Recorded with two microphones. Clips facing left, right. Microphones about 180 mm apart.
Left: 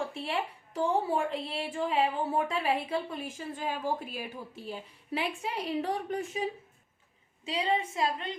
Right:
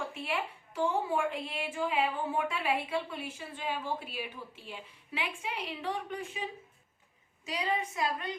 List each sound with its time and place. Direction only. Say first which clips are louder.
0.1 s a woman's voice: left 2 dB; 35° left (ahead or behind)
7.4 s a woman's voice: left 3 dB; 25° left (ahead or behind)